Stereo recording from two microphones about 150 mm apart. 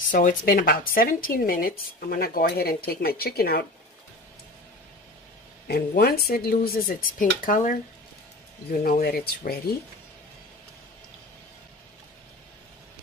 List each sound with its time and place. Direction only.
0.1 s speech: 65° left (ahead or behind); by 3.6 s 90° left
5.7 s speech: 90° left; by 7.7 s 65° left (ahead or behind)
8.8 s speech: 90° left